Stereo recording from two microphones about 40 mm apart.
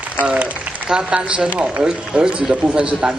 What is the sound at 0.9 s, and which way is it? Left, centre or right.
A man's voice, right.